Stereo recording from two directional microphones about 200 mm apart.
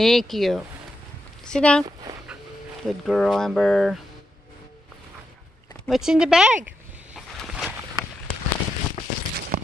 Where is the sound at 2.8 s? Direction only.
Centre (ahead or behind).